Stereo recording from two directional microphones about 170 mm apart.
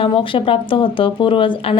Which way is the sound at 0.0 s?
30° left (ahead or behind).